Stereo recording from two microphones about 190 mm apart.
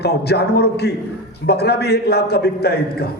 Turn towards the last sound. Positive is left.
turn(degrees=55)  # may be behind; listen again after turning